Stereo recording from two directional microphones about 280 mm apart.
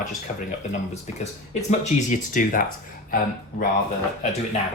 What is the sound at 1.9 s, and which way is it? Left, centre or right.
Speech, left.